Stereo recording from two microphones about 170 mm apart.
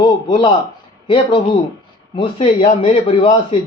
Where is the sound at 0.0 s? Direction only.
30° left (ahead or behind).